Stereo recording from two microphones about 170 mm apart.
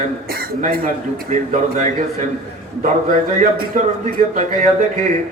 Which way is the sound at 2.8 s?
50° right (ahead or behind).